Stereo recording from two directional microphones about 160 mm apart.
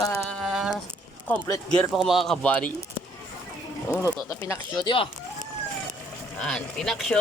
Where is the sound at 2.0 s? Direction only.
Centre (ahead or behind).